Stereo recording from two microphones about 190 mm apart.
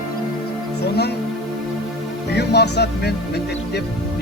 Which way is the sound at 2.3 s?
60° left (ahead or behind).